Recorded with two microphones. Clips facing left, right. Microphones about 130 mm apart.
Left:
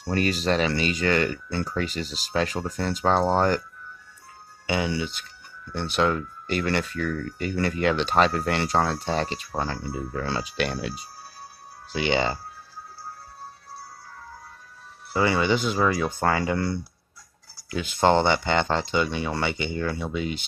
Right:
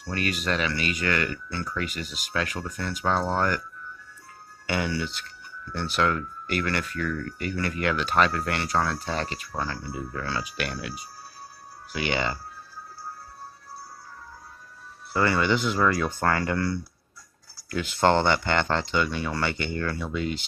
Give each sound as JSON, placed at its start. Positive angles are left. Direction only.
{"t": 0.0, "sound": "speech", "side_deg": 30}
{"t": 4.6, "sound": "speech", "side_deg": 20}
{"t": 15.1, "sound": "speech", "side_deg": 20}